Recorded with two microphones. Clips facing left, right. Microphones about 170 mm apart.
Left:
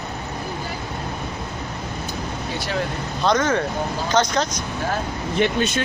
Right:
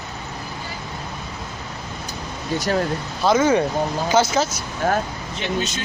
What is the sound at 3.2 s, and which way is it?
Speech, 5° right (ahead or behind).